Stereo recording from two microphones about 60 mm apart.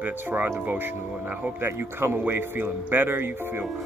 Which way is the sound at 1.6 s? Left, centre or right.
Right.